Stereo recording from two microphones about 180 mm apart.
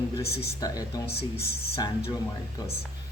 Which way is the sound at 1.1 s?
60° left (ahead or behind).